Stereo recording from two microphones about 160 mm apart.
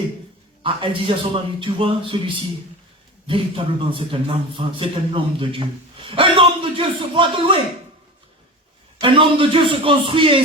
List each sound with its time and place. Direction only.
0.6 s a man's voice: 30° right (ahead or behind)
9.0 s a man's voice: 30° right (ahead or behind)